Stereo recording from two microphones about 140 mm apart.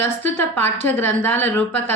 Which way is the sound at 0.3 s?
15° left (ahead or behind).